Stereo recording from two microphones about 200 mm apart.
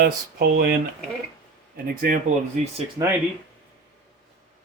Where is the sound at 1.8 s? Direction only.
45° right (ahead or behind).